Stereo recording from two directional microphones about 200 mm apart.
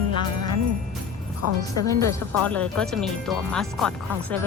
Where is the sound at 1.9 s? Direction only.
10° left (ahead or behind).